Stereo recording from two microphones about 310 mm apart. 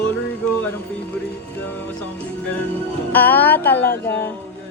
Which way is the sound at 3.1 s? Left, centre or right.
Centre.